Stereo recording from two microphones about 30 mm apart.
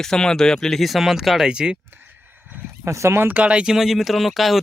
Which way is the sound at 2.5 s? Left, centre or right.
Right.